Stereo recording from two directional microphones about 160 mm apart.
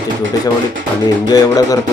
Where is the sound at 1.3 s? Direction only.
20° left (ahead or behind).